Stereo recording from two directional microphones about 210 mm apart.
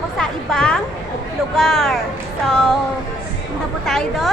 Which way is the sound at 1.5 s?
Centre (ahead or behind).